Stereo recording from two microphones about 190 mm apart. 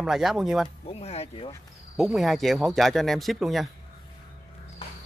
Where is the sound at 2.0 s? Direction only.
Centre (ahead or behind).